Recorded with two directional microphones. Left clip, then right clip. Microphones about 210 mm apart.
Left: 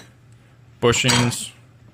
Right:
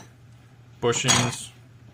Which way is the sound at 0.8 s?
40° left (ahead or behind).